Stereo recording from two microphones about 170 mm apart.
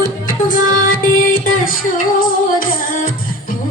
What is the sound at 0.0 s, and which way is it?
Music, 55° left (ahead or behind).